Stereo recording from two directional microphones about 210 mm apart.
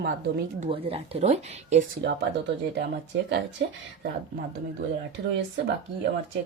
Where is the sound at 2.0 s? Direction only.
55° right (ahead or behind).